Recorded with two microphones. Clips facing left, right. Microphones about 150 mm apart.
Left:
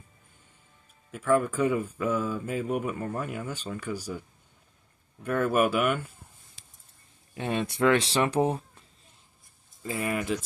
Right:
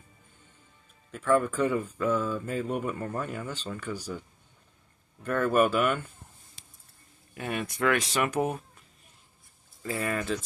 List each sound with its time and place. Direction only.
1.1 s speech: 10° left (ahead or behind)
5.2 s speech: 5° left (ahead or behind)
7.3 s speech: 25° left (ahead or behind)
9.8 s speech: 15° left (ahead or behind)